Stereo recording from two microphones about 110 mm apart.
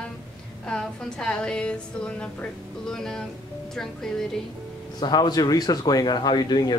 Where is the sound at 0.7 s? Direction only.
5° left (ahead or behind).